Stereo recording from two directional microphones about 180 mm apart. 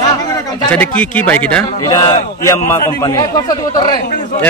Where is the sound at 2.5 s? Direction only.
15° left (ahead or behind).